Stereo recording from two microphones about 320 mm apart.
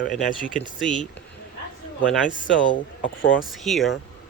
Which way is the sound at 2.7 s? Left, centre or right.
Left.